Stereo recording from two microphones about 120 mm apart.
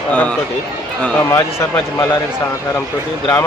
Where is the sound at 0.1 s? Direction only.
10° left (ahead or behind).